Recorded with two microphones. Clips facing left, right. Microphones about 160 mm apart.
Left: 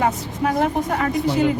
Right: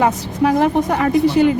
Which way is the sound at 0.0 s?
85° right.